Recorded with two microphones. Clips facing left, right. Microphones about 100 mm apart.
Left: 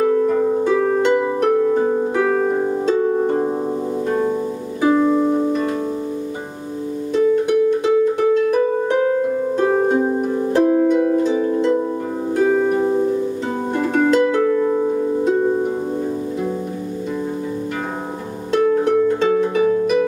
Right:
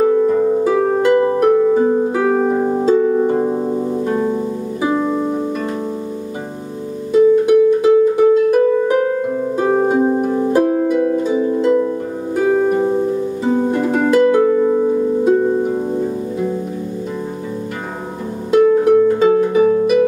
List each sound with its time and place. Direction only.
0.0 s harp: 5° right (ahead or behind)
1.1 s harp: 5° right (ahead or behind)
4.8 s harp: 5° right (ahead or behind)
7.1 s harp: 5° right (ahead or behind)
12.4 s music: 5° right (ahead or behind)
15.2 s harp: centre (ahead or behind)
18.5 s music: 5° right (ahead or behind)